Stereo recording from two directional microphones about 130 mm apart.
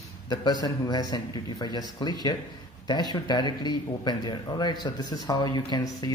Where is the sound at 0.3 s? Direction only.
35° left (ahead or behind).